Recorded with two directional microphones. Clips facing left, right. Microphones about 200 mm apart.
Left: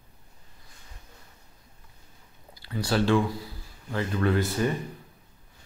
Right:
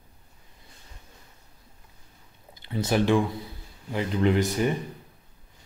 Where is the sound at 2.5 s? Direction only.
20° right (ahead or behind).